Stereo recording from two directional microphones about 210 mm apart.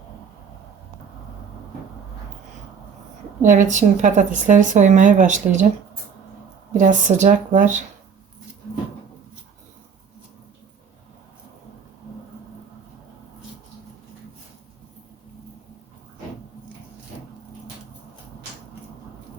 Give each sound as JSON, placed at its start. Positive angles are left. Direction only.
{"t": 3.4, "sound": "speech", "side_deg": -35}
{"t": 6.7, "sound": "speech", "side_deg": -35}